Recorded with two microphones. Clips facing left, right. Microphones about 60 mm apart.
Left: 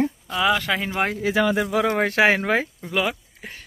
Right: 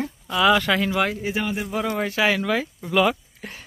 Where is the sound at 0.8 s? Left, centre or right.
Left.